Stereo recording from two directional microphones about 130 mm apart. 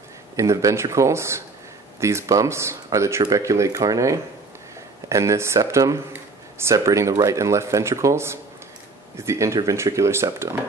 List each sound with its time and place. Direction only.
0.4 s speech: 25° right (ahead or behind)